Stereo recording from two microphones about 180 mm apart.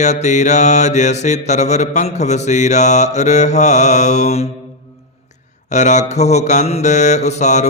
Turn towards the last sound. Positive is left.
turn(degrees=40)  # may be behind; listen again after turning